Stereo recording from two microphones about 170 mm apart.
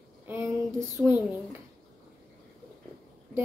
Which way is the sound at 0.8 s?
10° right (ahead or behind).